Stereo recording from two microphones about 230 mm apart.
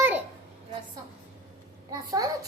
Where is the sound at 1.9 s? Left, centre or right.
Centre.